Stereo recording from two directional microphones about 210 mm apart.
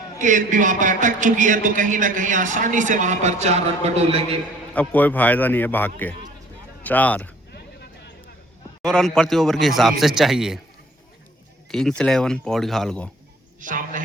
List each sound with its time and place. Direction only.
0.2 s a man's voice: 40° right (ahead or behind)
4.7 s a man's voice: 5° left (ahead or behind)
7.5 s music: 50° left (ahead or behind)
8.8 s a man's voice: 5° left (ahead or behind)
11.7 s a man's voice: centre (ahead or behind)
13.6 s a man's voice: 40° right (ahead or behind)